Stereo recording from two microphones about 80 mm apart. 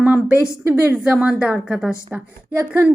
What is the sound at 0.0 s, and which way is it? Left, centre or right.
A woman's voice, centre.